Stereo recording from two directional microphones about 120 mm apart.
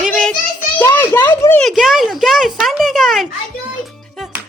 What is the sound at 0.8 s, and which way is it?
Speech, 20° left (ahead or behind).